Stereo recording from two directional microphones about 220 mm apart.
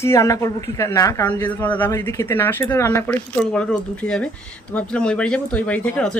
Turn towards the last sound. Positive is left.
turn(degrees=5)  # may be behind; listen again after turning